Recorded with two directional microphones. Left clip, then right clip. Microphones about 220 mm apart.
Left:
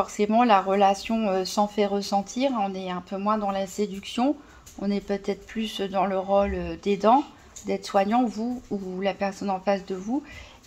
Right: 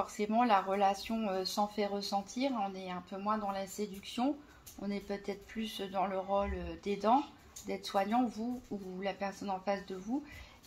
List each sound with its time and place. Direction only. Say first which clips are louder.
0.0 s speech: left 10 dB; 40° left (ahead or behind)